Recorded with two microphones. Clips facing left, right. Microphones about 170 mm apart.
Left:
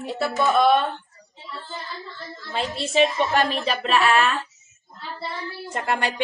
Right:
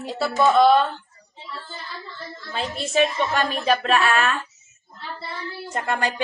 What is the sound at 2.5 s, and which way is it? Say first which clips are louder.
Speech: left 1 dB; 30° left (ahead or behind).